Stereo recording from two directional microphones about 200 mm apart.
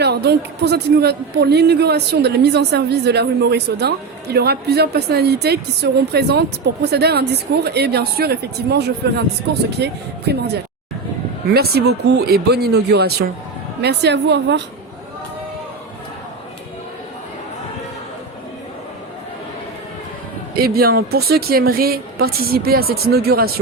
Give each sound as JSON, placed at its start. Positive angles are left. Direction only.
{"t": 0.0, "sound": "a woman's voice", "side_deg": -55}
{"t": 20.6, "sound": "a woman's voice", "side_deg": -50}